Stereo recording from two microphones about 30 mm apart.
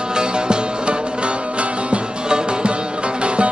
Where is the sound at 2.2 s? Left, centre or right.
Right.